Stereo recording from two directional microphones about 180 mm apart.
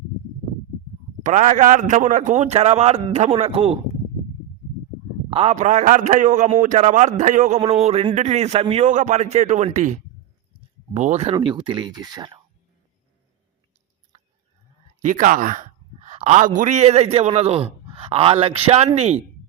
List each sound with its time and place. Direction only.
1.2 s a man's voice: 40° right (ahead or behind)
5.3 s a man's voice: 30° right (ahead or behind)
5.5 s a man's voice: 45° right (ahead or behind)
11.3 s speech: 25° right (ahead or behind)
15.0 s a man's voice: 45° right (ahead or behind)